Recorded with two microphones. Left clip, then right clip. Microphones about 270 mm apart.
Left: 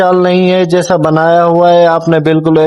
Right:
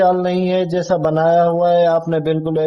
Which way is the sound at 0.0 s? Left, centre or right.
Left.